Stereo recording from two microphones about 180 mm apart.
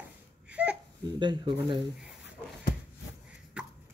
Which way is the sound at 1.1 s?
25° right (ahead or behind).